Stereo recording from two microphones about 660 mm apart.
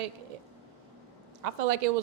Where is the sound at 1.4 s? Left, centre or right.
Right.